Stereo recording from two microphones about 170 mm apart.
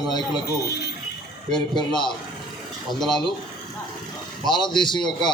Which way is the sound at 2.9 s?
Centre (ahead or behind).